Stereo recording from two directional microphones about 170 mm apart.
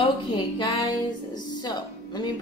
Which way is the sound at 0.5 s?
25° left (ahead or behind).